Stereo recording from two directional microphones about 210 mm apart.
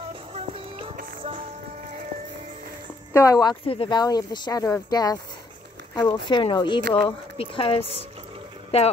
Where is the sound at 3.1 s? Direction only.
15° left (ahead or behind).